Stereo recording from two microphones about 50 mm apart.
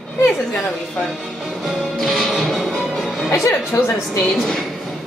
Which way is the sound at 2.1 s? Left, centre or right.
Centre.